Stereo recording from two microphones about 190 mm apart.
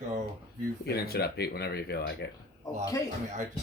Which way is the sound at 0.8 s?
55° left (ahead or behind).